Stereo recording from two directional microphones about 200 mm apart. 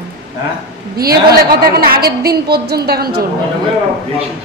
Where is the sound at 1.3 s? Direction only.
50° right (ahead or behind).